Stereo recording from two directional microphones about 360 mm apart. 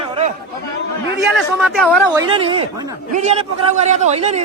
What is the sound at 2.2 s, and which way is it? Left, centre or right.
Speech, centre.